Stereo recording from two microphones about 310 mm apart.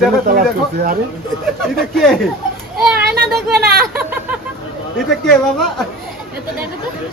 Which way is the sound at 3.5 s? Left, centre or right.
Centre.